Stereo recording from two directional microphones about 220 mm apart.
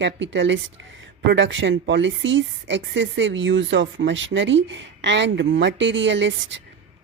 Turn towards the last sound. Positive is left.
turn(degrees=-55)  # may be behind; listen again after turning